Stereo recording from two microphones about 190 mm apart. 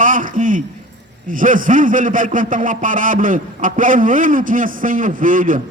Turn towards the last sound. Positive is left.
turn(degrees=-45)  # may be behind; listen again after turning